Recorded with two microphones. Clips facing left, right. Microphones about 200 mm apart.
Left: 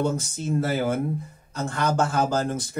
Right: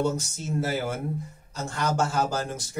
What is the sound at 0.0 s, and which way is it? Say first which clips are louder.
Speech: left 2 dB; 55° left (ahead or behind).